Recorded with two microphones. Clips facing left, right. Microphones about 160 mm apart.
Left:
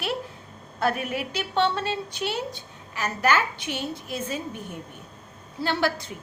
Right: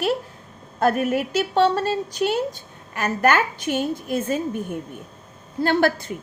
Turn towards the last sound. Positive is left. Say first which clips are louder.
# right 6 dB
turn(degrees=-50)  # may be behind; listen again after turning